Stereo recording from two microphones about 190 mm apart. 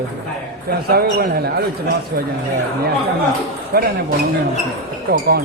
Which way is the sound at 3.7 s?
50° right (ahead or behind).